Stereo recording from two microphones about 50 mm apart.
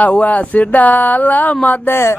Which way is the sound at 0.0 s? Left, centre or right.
Left.